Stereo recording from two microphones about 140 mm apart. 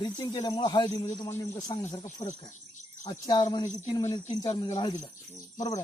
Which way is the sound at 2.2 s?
35° left (ahead or behind).